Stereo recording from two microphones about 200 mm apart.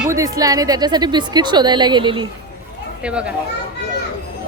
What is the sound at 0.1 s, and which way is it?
A woman's voice, 15° right (ahead or behind).